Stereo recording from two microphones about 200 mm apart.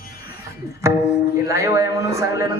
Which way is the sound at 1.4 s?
15° right (ahead or behind).